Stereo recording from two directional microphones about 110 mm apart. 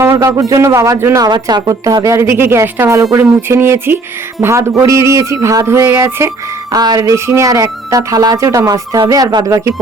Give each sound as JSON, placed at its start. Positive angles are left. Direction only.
{"t": 0.0, "sound": "speech", "side_deg": -30}
{"t": 6.7, "sound": "speech", "side_deg": -35}